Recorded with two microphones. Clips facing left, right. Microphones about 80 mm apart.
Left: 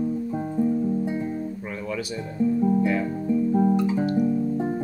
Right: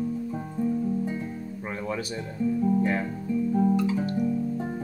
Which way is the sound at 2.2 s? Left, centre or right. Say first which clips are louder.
Left 5 dB; centre.